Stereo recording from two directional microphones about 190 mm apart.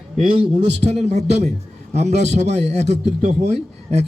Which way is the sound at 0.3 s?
35° right (ahead or behind).